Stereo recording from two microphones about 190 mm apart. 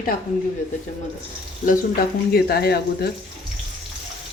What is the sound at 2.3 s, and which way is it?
Speech, 55° left (ahead or behind).